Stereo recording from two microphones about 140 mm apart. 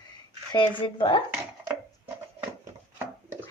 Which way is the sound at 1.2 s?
15° right (ahead or behind).